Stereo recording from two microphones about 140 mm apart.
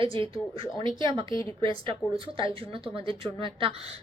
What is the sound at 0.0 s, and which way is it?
Speech, 40° right (ahead or behind).